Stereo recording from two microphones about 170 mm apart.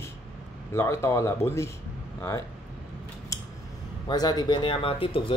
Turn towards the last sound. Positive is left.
turn(degrees=30)  # may be behind; listen again after turning